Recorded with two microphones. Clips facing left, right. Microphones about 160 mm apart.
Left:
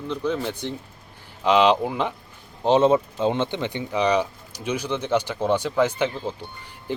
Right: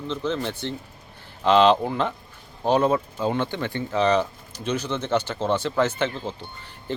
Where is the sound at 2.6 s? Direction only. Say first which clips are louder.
Left 3 dB; 25° left (ahead or behind).